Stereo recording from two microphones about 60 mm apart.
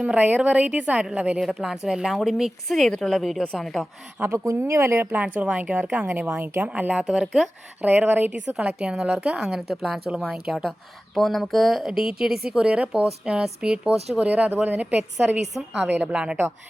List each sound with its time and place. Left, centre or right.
0.0 s a woman's voice: right
1.4 s a woman's voice: centre
4.2 s a woman's voice: right
4.7 s speech: right
5.1 s a woman's voice: right
7.2 s a woman's voice: centre
7.8 s a woman's voice: right
8.3 s a woman's voice: right
9.4 s a woman's voice: centre
11.1 s a woman's voice: centre; by 15.4 s right
15.4 s a woman's voice: centre
16.1 s a woman's voice: centre